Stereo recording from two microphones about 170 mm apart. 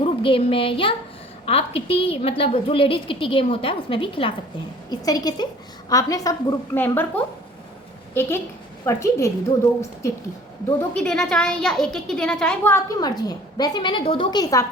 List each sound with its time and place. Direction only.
0.0 s a woman's voice: 30° left (ahead or behind); by 9.3 s 15° left (ahead or behind)
10.8 s a child's voice: 5° left (ahead or behind)
12.6 s a woman's voice: 20° left (ahead or behind)